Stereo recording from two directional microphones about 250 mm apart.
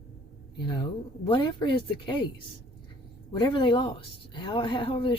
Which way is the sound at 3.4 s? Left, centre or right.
Centre.